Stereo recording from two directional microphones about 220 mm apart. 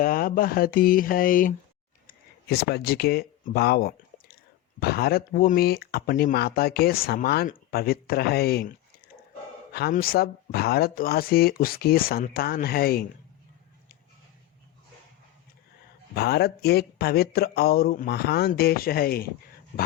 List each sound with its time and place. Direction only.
0.0 s speech: 40° left (ahead or behind)
2.0 s a sound: 45° left (ahead or behind)
4.8 s speech: 45° left (ahead or behind)
9.7 s speech: 45° left (ahead or behind)
16.1 s speech: 45° left (ahead or behind)